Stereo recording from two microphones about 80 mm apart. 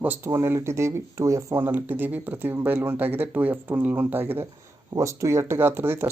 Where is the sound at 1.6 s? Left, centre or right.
Right.